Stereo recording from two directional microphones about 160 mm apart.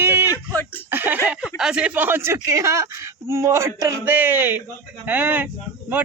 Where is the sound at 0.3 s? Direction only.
10° left (ahead or behind).